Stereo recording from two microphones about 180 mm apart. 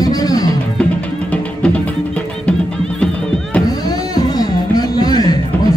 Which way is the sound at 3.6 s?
20° left (ahead or behind).